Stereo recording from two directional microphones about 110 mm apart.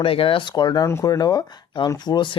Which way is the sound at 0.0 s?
55° left (ahead or behind).